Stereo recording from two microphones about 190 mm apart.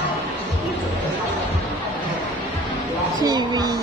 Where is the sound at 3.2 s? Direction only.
20° right (ahead or behind).